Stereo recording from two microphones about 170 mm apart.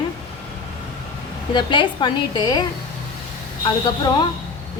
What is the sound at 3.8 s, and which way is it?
Speech, 25° left (ahead or behind).